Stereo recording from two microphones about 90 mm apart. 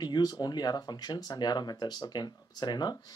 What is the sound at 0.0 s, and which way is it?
Speech, 50° left (ahead or behind).